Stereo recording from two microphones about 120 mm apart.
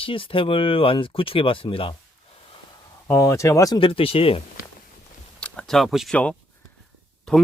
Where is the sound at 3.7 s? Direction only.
45° left (ahead or behind).